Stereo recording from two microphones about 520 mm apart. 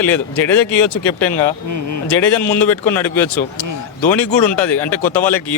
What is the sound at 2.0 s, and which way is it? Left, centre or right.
Speech, left.